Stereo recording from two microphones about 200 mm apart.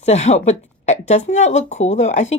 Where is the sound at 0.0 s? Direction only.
35° left (ahead or behind).